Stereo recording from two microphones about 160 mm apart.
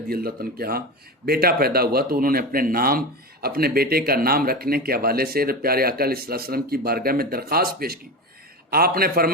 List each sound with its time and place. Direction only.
0.1 s speech: 70° right (ahead or behind)